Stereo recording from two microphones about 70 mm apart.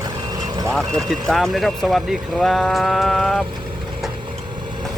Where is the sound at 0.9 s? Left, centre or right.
Centre.